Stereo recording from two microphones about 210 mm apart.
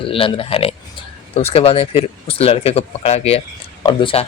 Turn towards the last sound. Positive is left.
turn(degrees=25)  # may be behind; listen again after turning